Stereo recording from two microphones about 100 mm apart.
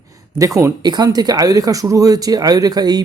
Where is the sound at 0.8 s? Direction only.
45° right (ahead or behind).